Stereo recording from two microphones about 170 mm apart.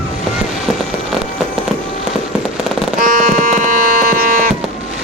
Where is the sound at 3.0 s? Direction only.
55° right (ahead or behind).